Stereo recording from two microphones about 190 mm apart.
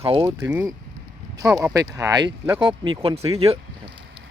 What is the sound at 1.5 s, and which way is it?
Speech, 20° right (ahead or behind).